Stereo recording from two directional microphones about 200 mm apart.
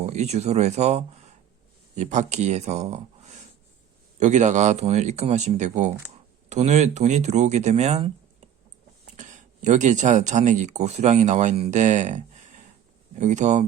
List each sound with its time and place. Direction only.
0.0 s speech: 35° right (ahead or behind)
9.1 s speech: 40° right (ahead or behind)